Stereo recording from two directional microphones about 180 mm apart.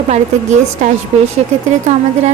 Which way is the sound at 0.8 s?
40° right (ahead or behind).